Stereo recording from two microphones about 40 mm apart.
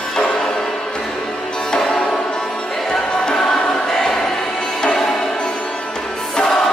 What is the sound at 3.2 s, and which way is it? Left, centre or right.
Music, centre.